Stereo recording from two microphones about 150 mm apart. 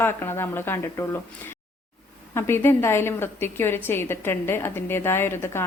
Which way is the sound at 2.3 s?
15° left (ahead or behind).